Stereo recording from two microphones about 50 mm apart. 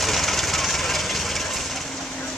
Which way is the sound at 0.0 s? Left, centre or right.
Centre.